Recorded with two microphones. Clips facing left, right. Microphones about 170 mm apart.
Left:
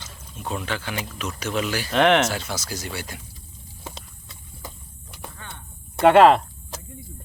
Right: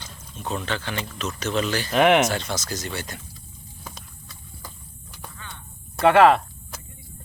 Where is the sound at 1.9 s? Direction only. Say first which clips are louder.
Right 1 dB; 10° right (ahead or behind).